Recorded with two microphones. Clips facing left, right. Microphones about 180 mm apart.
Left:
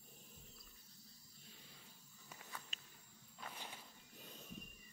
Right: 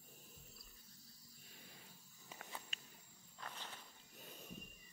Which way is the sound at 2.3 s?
20° right (ahead or behind).